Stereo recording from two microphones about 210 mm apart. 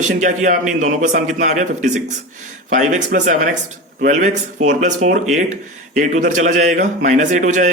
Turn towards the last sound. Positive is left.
turn(degrees=-35)  # may be behind; listen again after turning